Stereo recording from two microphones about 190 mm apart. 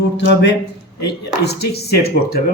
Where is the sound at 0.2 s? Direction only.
60° left (ahead or behind).